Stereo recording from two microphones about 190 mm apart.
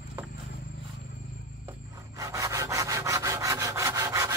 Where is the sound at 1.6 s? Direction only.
15° right (ahead or behind).